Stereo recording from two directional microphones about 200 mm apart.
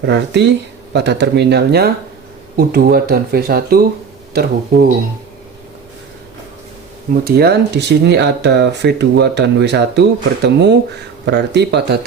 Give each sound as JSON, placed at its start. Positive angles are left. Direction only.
{"t": 0.0, "sound": "speech", "side_deg": -60}
{"t": 7.3, "sound": "speech", "side_deg": -55}